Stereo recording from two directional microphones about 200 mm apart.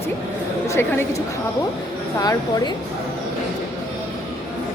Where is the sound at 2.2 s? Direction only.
20° left (ahead or behind).